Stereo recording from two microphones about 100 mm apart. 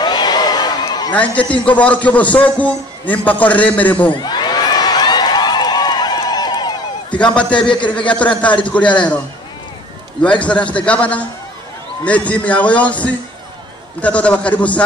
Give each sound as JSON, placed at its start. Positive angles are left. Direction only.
{"t": 0.0, "sound": "a sound", "side_deg": 45}
{"t": 1.1, "sound": "a man's voice", "side_deg": 15}
{"t": 4.1, "sound": "a sound", "side_deg": 45}
{"t": 7.5, "sound": "a man's voice", "side_deg": 55}
{"t": 8.5, "sound": "a man's voice", "side_deg": 15}
{"t": 10.4, "sound": "a man's voice", "side_deg": 10}